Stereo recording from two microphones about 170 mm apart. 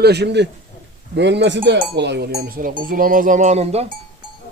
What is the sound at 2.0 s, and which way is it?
Speech, 75° right (ahead or behind).